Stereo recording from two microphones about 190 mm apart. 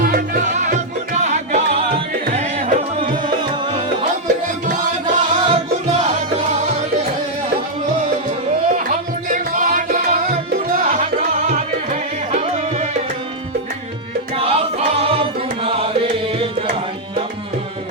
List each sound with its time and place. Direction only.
0.0 s music: 50° right (ahead or behind)
5.0 s music: 30° right (ahead or behind)
8.7 s music: 40° right (ahead or behind)
14.3 s music: 30° right (ahead or behind)